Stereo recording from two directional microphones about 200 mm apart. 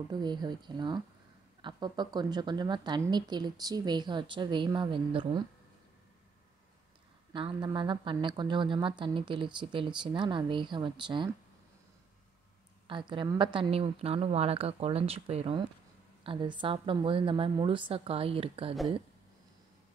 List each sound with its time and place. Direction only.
0.1 s a woman's voice: 20° right (ahead or behind)
7.3 s a woman's voice: 25° right (ahead or behind)
12.8 s a woman's voice: 25° right (ahead or behind)